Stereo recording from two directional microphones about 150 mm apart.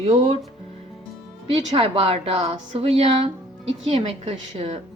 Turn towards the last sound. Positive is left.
turn(degrees=-45)  # may be behind; listen again after turning